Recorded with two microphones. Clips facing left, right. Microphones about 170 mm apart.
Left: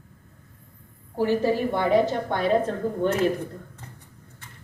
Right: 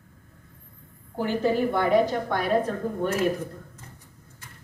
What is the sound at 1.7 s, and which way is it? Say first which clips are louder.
Speech: even; 20° left (ahead or behind).